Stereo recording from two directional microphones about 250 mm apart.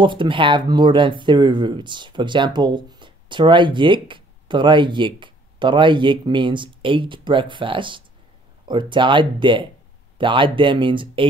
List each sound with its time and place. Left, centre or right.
0.0 s speech: centre